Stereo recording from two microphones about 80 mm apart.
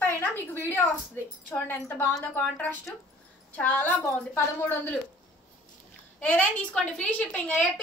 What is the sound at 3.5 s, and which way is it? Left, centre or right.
A woman's voice, left.